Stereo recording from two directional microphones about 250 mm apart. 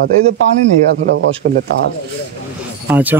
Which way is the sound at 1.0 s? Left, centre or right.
Right.